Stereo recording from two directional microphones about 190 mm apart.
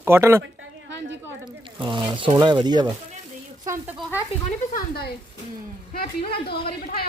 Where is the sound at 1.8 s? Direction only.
25° right (ahead or behind).